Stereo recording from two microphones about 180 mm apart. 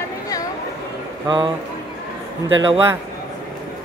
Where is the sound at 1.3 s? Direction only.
25° right (ahead or behind).